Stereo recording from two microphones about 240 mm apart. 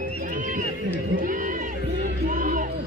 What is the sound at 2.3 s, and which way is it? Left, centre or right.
Music, right.